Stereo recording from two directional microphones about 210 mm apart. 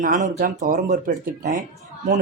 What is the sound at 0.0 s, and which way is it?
Speech, 35° right (ahead or behind).